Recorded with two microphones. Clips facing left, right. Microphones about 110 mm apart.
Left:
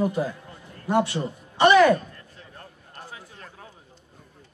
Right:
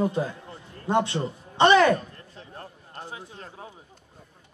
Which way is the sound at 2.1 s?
35° right (ahead or behind).